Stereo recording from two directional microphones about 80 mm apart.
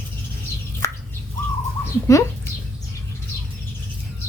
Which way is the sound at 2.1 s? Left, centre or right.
Left.